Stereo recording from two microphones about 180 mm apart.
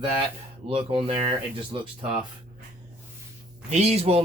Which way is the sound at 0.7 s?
30° right (ahead or behind).